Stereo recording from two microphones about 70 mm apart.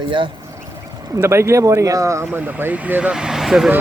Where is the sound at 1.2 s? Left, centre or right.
Right.